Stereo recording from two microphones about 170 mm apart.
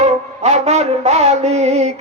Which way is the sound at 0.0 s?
40° right (ahead or behind).